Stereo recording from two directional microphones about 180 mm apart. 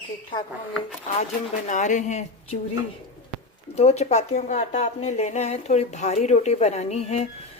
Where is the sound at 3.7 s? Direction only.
35° left (ahead or behind).